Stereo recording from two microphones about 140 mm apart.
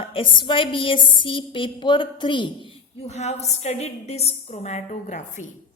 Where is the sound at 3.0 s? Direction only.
55° left (ahead or behind).